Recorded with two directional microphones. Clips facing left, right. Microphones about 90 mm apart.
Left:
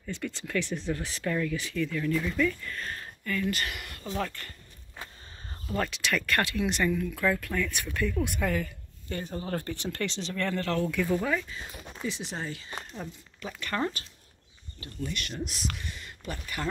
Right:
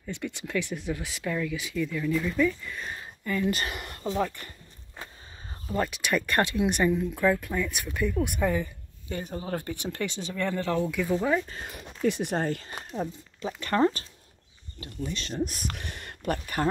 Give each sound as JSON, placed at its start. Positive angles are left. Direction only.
{"t": 0.0, "sound": "speech", "side_deg": -15}
{"t": 4.1, "sound": "speech", "side_deg": -15}
{"t": 5.7, "sound": "speech", "side_deg": -10}
{"t": 11.4, "sound": "speech", "side_deg": -55}
{"t": 12.9, "sound": "speech", "side_deg": -30}
{"t": 15.4, "sound": "speech", "side_deg": -45}
{"t": 15.8, "sound": "speech", "side_deg": -60}